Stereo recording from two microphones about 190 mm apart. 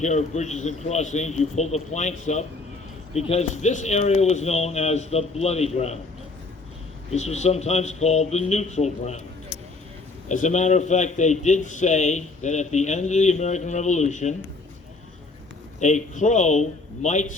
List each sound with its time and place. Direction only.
0.0 s a man's voice: 40° left (ahead or behind)
7.1 s a man's voice: 35° left (ahead or behind)
10.2 s a man's voice: 40° left (ahead or behind)
15.8 s a man's voice: 40° left (ahead or behind)